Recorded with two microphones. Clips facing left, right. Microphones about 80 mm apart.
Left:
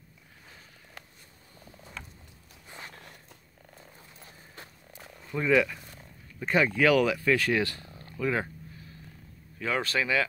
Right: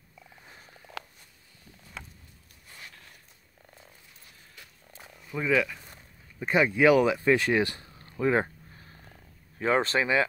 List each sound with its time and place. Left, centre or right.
2.0 s a sound: centre
2.7 s walk: left
5.0 s frog: centre
6.4 s speech: centre